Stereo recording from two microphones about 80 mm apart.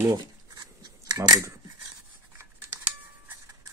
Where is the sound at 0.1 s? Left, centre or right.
Right.